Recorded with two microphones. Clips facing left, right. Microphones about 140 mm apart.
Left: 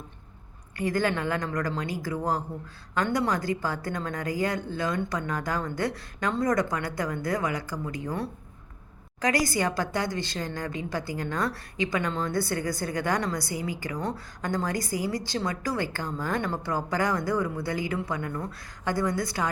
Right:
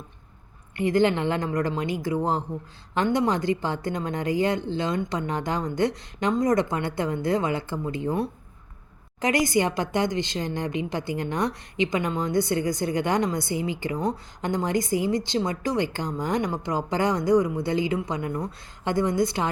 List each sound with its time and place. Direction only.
0.8 s a woman's voice: 20° right (ahead or behind)